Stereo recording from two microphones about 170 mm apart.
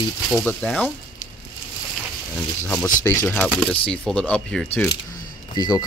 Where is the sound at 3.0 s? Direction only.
15° left (ahead or behind).